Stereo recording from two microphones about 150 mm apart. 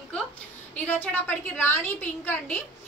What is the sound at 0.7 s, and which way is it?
Speech, 10° left (ahead or behind).